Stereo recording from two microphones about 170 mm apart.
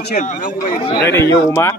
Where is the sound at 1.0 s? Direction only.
15° left (ahead or behind).